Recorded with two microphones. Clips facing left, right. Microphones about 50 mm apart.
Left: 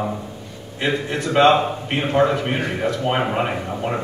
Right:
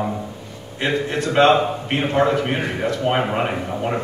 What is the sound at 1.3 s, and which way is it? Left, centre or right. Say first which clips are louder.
A man's voice: even; centre.